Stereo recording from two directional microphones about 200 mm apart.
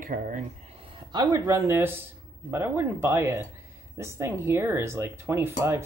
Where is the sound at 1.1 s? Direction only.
15° right (ahead or behind).